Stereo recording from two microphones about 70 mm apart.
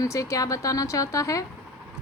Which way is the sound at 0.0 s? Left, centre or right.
Left.